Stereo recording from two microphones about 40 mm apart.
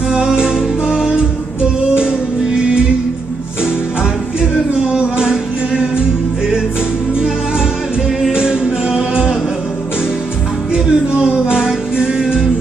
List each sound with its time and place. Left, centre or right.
0.1 s music: centre
4.4 s music: right
8.3 s music: right
10.7 s music: right